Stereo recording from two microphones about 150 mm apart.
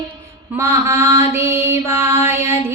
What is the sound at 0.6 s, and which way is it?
Mantra, 20° right (ahead or behind).